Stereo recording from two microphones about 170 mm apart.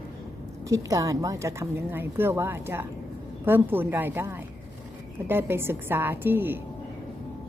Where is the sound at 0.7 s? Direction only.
20° right (ahead or behind).